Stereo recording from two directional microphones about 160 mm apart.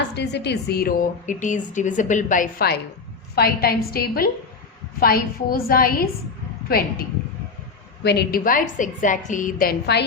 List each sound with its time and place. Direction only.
0.1 s a woman's voice: 90° left; by 2.7 s 60° left (ahead or behind)
3.3 s a woman's voice: 75° left (ahead or behind)
8.0 s a woman's voice: 85° left